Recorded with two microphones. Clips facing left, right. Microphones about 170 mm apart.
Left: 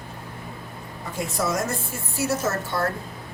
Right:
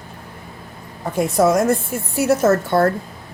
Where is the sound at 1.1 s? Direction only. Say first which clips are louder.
Right 10 dB; 55° right (ahead or behind).